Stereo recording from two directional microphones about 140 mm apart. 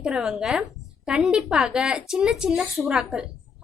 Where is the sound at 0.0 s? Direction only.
5° right (ahead or behind).